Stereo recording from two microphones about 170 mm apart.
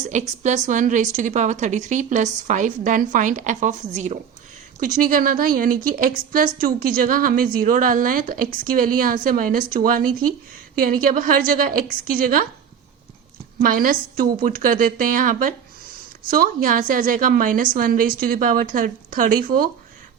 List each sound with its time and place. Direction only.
0.0 s a woman's voice: 45° right (ahead or behind)
13.6 s speech: 60° right (ahead or behind)